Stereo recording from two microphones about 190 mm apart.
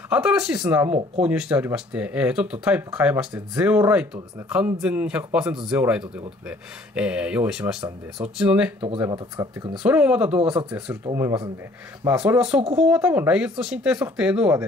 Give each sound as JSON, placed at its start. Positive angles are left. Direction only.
{"t": 0.1, "sound": "speech", "side_deg": -5}
{"t": 9.0, "sound": "speech", "side_deg": -20}
{"t": 9.8, "sound": "speech", "side_deg": -5}
{"t": 10.4, "sound": "speech", "side_deg": -25}